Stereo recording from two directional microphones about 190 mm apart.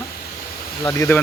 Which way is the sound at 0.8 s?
15° left (ahead or behind).